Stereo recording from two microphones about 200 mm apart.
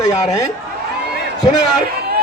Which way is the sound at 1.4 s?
20° left (ahead or behind).